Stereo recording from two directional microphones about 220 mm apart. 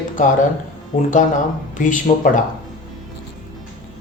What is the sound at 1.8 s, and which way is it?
Speech, 35° left (ahead or behind).